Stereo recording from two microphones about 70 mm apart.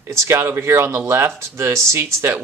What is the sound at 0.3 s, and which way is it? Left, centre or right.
Speech, right.